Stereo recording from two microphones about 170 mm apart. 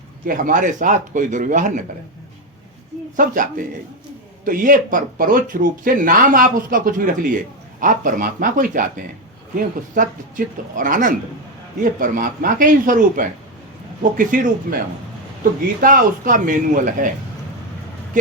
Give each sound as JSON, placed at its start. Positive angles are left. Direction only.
{"t": 0.3, "sound": "speech", "side_deg": -50}
{"t": 3.2, "sound": "speech", "side_deg": -50}
{"t": 15.8, "sound": "speech", "side_deg": -50}